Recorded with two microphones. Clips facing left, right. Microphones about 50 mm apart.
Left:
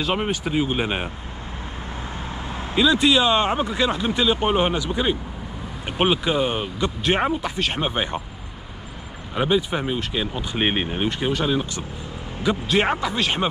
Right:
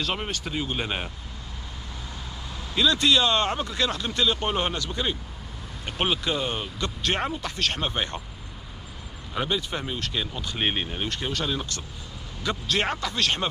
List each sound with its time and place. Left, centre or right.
0.0 s speech: centre
2.4 s vehicle: left
2.7 s speech: centre
9.3 s speech: centre